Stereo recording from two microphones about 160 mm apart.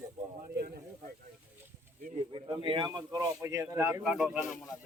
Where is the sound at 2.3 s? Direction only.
35° right (ahead or behind); by 4.0 s 15° right (ahead or behind).